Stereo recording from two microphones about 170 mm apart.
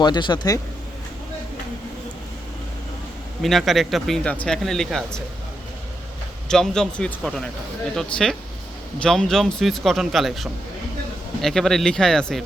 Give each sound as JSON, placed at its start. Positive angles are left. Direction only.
{"t": 0.0, "sound": "speech", "side_deg": 25}
{"t": 3.4, "sound": "speech", "side_deg": 0}
{"t": 6.5, "sound": "speech", "side_deg": 5}